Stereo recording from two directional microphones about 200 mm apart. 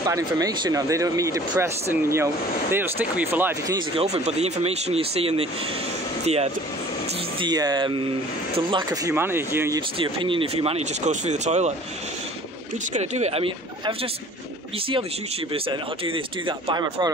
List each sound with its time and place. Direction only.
0.4 s speech: 15° right (ahead or behind)
3.9 s speech: 30° right (ahead or behind)
7.3 s speech: 20° right (ahead or behind)
9.9 s speech: 25° right (ahead or behind)
12.9 s speech: 35° right (ahead or behind)
15.5 s speech: 25° right (ahead or behind)